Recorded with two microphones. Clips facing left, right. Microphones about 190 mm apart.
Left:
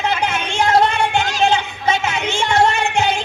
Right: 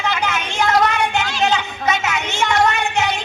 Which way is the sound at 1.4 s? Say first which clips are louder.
Left 1 dB; 30° left (ahead or behind).